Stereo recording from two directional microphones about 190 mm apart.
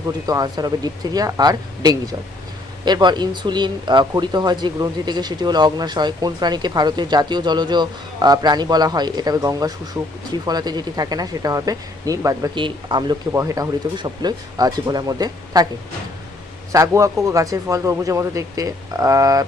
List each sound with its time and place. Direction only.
0.3 s speech: 20° right (ahead or behind)
16.7 s speech: 15° right (ahead or behind)